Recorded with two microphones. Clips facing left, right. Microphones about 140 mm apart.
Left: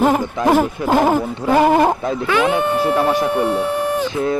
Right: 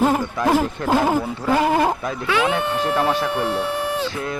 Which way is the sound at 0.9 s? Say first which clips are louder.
Left 2 dB; 65° left (ahead or behind).